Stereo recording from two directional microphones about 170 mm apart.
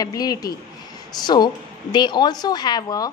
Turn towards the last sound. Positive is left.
turn(degrees=25)  # may be behind; listen again after turning